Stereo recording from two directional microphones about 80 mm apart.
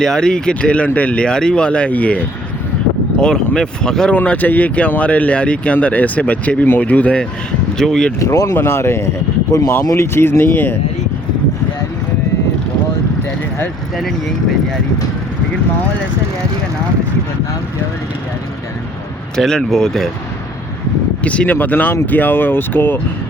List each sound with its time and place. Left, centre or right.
0.0 s speech: centre
4.2 s speech: left
8.2 s speech: left
8.5 s speech: left
13.9 s speech: centre
19.4 s speech: centre
21.2 s speech: centre